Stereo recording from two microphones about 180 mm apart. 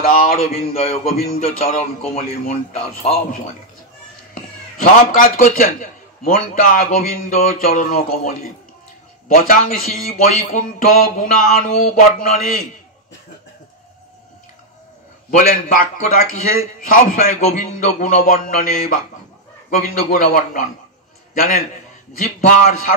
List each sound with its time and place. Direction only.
0.0 s a man's voice: 55° left (ahead or behind)
1.1 s a man's voice: 40° left (ahead or behind)
4.3 s a man's voice: 50° left (ahead or behind)
15.3 s a man's voice: 50° left (ahead or behind)